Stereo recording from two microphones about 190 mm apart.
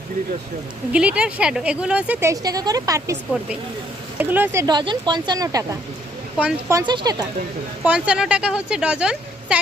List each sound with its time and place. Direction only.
0.9 s speech: 5° right (ahead or behind)
4.2 s speech: 10° right (ahead or behind)
7.9 s a woman's voice: 5° right (ahead or behind)